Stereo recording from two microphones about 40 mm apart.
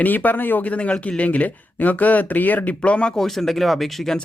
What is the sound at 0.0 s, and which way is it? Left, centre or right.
Speech, left.